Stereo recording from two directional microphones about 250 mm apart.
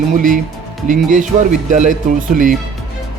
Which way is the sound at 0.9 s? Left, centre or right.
Right.